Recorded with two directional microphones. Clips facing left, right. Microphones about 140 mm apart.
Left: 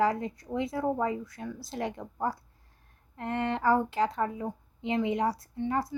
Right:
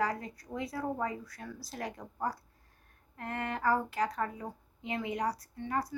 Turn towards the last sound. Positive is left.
turn(degrees=25)  # may be behind; listen again after turning